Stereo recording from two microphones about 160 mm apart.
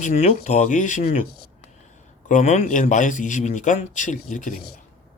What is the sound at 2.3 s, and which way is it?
Speech, 50° left (ahead or behind).